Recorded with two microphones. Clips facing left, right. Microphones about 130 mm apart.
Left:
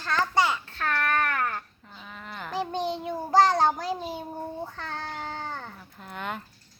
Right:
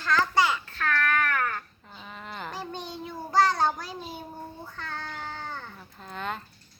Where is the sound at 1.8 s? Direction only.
5° right (ahead or behind).